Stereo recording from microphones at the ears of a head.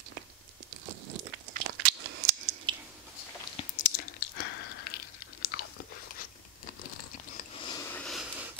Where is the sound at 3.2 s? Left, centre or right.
Left.